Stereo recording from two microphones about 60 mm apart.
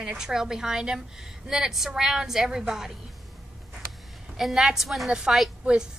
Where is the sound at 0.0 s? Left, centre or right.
Centre.